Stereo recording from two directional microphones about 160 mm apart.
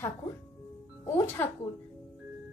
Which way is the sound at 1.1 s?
15° left (ahead or behind).